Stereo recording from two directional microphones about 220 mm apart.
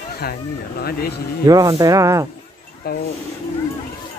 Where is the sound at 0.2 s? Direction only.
45° left (ahead or behind).